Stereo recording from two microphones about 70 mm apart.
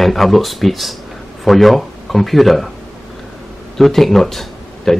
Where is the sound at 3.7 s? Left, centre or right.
Centre.